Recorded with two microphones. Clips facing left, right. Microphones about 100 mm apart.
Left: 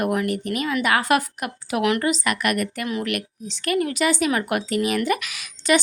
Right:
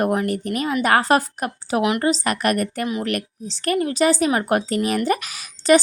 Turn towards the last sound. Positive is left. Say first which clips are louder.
# right 5 dB
turn(degrees=-35)  # may be behind; listen again after turning